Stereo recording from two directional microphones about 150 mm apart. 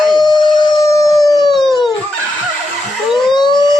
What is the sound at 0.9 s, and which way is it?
Howl, 20° left (ahead or behind).